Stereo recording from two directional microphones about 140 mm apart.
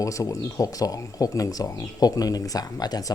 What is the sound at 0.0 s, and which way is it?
Speech, 25° left (ahead or behind).